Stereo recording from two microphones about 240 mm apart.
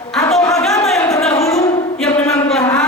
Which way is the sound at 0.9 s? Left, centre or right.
Centre.